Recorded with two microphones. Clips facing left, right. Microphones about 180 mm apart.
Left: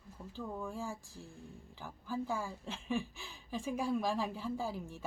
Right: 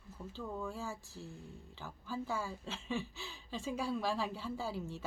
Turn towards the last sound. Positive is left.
turn(degrees=15)  # may be behind; listen again after turning